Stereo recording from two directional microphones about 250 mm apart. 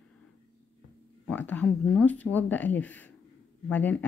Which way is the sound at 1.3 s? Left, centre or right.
Centre.